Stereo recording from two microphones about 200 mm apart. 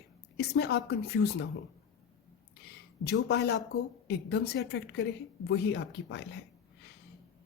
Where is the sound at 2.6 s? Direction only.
55° left (ahead or behind).